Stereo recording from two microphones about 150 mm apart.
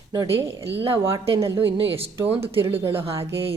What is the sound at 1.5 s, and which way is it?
Speech, 35° right (ahead or behind).